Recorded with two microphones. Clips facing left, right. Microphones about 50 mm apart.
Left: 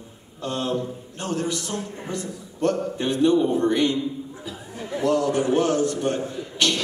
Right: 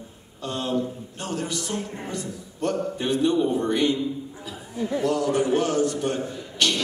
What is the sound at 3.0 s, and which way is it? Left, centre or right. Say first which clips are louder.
Speech: left 3 dB; centre.